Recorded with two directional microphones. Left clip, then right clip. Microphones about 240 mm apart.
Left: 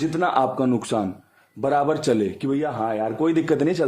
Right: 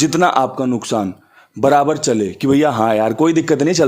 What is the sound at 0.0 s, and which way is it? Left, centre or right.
Speech, right.